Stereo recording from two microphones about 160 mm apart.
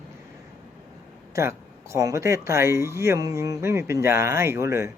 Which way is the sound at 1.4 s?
15° right (ahead or behind).